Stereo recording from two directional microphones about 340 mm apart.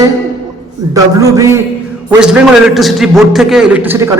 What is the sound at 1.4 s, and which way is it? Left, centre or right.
A man's voice, centre.